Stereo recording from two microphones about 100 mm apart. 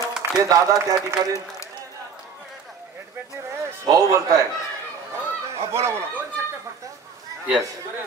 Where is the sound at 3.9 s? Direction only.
35° right (ahead or behind).